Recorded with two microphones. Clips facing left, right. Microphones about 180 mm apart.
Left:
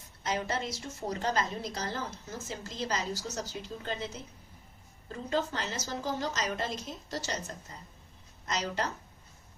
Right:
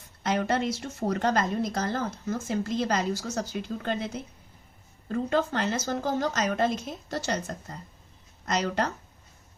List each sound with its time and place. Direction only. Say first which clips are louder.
0.2 s a woman's voice: right 7 dB; 60° right (ahead or behind)